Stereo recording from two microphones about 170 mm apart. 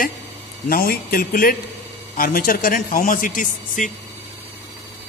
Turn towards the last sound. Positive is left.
turn(degrees=55)  # may be behind; listen again after turning